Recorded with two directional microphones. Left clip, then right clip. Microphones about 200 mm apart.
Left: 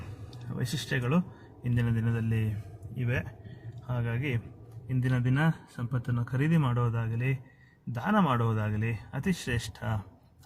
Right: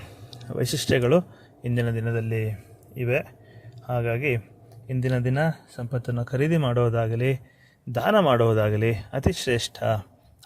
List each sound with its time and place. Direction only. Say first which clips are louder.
0.3 s speech: right 11 dB; 40° right (ahead or behind)